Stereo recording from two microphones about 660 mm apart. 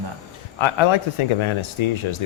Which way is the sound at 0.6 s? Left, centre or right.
Left.